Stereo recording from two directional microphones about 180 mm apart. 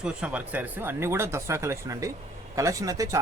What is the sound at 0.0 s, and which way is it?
Speech, 5° right (ahead or behind).